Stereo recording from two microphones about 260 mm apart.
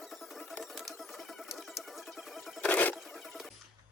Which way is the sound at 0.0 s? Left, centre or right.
Centre.